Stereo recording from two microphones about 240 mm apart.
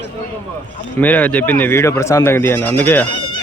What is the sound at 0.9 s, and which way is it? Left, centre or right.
Speech, centre.